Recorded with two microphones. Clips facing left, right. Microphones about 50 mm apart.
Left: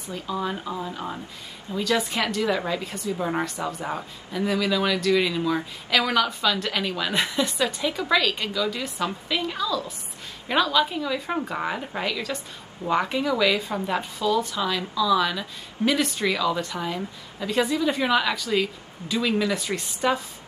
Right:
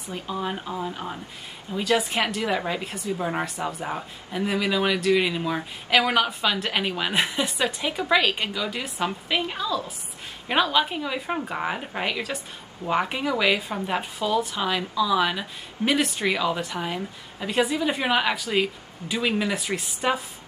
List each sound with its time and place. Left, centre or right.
0.1 s a woman's voice: right
0.7 s speech: centre
1.8 s a woman's voice: right
4.3 s a woman's voice: right